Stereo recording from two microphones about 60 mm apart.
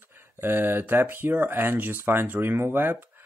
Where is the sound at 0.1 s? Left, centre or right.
Right.